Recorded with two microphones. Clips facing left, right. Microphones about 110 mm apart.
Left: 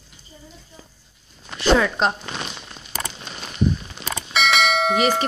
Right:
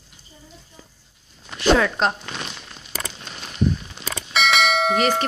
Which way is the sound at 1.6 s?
Centre (ahead or behind).